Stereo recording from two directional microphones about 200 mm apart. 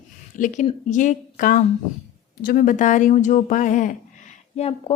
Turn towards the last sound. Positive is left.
turn(degrees=30)  # may be behind; listen again after turning